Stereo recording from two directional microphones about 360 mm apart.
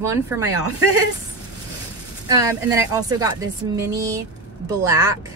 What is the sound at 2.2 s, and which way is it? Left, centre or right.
A woman's voice, centre.